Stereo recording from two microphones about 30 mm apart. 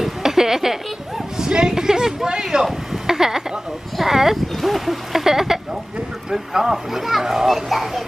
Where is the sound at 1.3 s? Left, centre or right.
Right.